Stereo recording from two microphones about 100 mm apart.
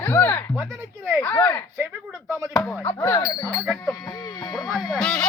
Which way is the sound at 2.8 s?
30° left (ahead or behind).